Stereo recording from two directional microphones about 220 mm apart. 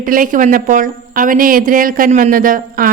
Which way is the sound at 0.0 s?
40° right (ahead or behind).